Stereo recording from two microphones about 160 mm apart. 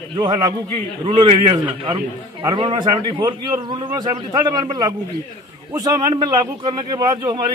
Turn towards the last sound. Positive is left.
turn(degrees=-25)  # may be behind; listen again after turning